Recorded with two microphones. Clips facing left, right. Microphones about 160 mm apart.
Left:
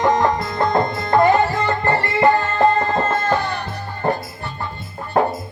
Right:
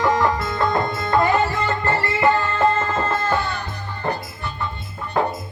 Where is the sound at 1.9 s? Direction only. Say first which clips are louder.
Left 3 dB; 35° left (ahead or behind).